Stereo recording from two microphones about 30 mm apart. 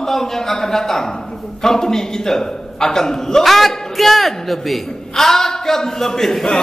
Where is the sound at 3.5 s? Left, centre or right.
Centre.